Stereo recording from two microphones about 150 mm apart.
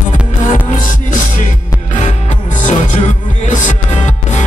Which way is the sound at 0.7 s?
60° left (ahead or behind).